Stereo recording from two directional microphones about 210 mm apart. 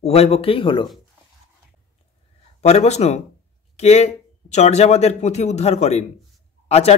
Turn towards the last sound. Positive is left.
turn(degrees=30)  # may be behind; listen again after turning